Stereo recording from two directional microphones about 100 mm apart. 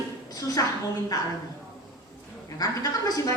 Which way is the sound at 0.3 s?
40° left (ahead or behind).